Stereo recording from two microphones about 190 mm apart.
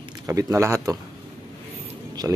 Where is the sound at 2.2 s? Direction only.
15° right (ahead or behind).